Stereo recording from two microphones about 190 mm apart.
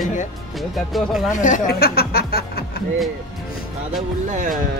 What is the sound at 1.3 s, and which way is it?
Speech, 40° left (ahead or behind).